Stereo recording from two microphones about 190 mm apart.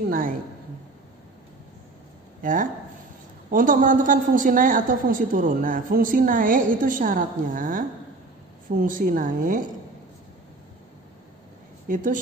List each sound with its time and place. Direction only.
2.4 s a woman's voice: 45° right (ahead or behind)
11.9 s a woman's voice: 45° right (ahead or behind)